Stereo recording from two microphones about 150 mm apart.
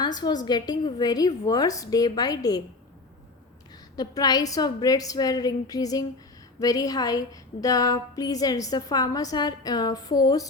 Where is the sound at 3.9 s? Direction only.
25° left (ahead or behind).